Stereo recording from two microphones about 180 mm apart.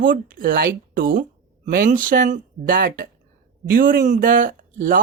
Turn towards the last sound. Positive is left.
turn(degrees=-50)  # may be behind; listen again after turning